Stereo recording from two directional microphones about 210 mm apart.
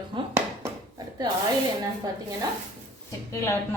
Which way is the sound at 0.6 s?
20° right (ahead or behind).